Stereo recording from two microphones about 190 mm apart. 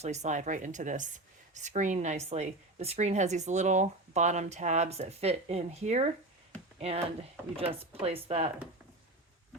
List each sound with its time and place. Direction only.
0.0 s speech: 35° right (ahead or behind)